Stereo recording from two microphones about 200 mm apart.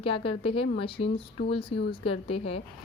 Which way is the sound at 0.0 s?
25° left (ahead or behind).